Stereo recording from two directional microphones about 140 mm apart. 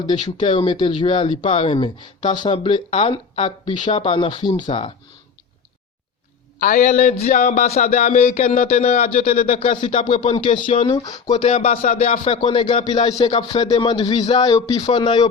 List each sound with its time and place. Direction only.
0.1 s speech: 35° left (ahead or behind)
6.6 s a man's voice: 65° left (ahead or behind); by 9.4 s 50° left (ahead or behind)
9.6 s a sound: 45° left (ahead or behind)
10.2 s speech: 45° left (ahead or behind)